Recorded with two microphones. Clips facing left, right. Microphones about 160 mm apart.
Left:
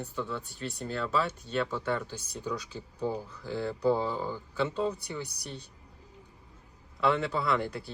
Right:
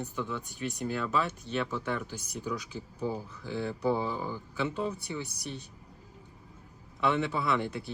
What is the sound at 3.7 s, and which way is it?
Speech, centre (ahead or behind).